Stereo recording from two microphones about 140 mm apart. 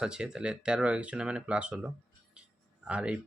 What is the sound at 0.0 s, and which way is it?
Speech, 5° right (ahead or behind).